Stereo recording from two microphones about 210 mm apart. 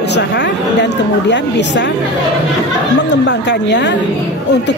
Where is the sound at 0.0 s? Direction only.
55° left (ahead or behind).